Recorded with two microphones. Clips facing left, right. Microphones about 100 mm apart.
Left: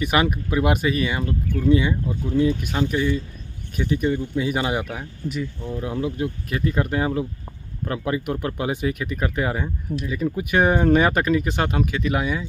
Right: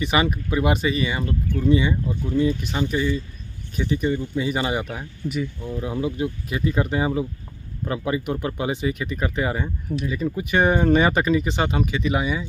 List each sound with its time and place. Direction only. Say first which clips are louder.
0.0 s speech: left 1 dB; 5° left (ahead or behind)